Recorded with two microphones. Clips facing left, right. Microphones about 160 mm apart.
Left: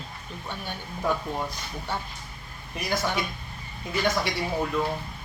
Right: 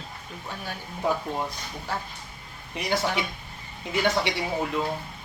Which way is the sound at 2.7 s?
20° right (ahead or behind).